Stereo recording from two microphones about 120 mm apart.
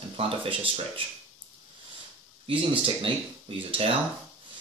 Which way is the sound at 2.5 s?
45° right (ahead or behind).